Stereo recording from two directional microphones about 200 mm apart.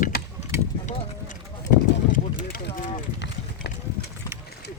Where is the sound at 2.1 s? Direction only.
40° left (ahead or behind).